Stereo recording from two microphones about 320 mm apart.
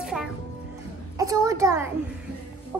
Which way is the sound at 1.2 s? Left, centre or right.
Centre.